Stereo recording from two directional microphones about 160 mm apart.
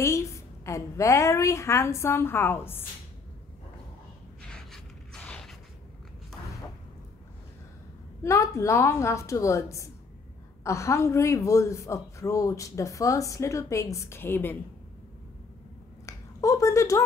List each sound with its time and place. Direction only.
0.0 s a woman's voice: 20° left (ahead or behind)
4.4 s a sound: 5° left (ahead or behind)
8.2 s a woman's voice: 20° left (ahead or behind)
16.1 s finger snapping: 20° left (ahead or behind)